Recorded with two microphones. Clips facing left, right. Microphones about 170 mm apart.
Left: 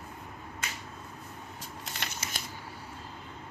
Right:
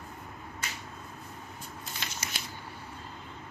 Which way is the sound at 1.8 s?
75° left (ahead or behind).